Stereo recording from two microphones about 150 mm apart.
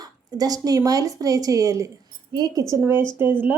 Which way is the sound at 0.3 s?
25° right (ahead or behind).